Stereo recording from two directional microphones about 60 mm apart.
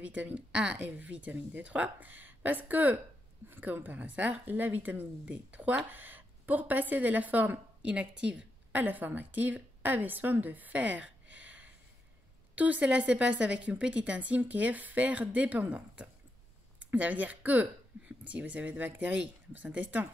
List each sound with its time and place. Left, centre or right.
0.0 s a woman's voice: right